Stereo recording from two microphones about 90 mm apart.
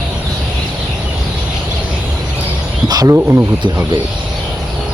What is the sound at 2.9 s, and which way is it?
Speech, 45° right (ahead or behind).